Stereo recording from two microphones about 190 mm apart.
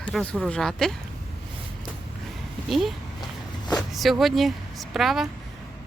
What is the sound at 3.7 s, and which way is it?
Speech, centre (ahead or behind).